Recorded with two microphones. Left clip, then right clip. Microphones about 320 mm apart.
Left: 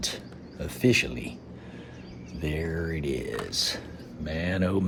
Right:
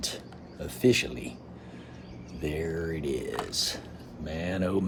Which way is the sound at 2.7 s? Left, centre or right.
Centre.